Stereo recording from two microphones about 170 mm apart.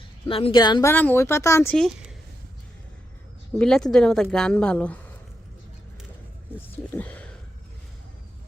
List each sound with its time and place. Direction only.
0.3 s speech: 35° left (ahead or behind); by 1.7 s 15° left (ahead or behind)
1.7 s a woman's voice: centre (ahead or behind)
3.6 s a woman's voice: 5° left (ahead or behind)
6.9 s a sound: 10° left (ahead or behind)